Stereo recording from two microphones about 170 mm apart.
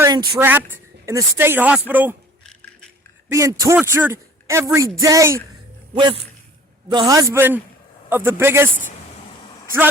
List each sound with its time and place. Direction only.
0.0 s speech: 25° right (ahead or behind)
0.3 s a man's voice: 15° right (ahead or behind)
3.3 s a man's voice: 20° right (ahead or behind)